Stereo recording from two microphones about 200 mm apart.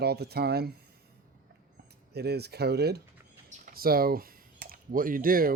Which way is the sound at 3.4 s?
40° right (ahead or behind).